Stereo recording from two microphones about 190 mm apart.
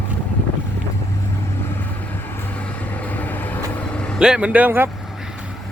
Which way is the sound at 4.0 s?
Centre (ahead or behind).